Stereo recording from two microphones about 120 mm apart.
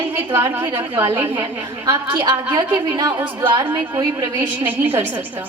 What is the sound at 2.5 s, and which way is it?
Speech, 30° right (ahead or behind).